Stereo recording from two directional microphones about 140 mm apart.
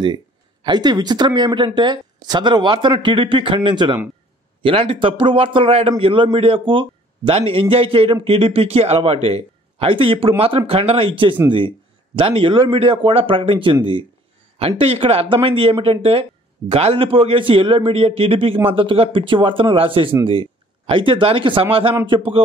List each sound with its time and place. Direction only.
0.7 s speech: 30° right (ahead or behind)
14.8 s speech: 45° right (ahead or behind)